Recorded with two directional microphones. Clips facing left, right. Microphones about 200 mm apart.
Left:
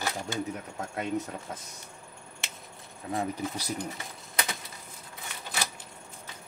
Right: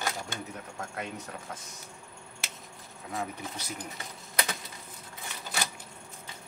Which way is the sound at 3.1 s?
35° left (ahead or behind).